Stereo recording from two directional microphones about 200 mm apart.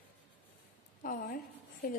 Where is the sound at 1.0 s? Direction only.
45° left (ahead or behind).